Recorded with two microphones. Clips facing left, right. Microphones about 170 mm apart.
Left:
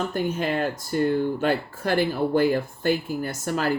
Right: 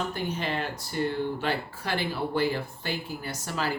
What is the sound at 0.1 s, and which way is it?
Speech, 45° left (ahead or behind).